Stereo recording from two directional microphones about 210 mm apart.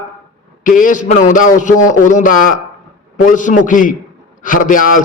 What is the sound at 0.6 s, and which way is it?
A man's voice, 40° left (ahead or behind).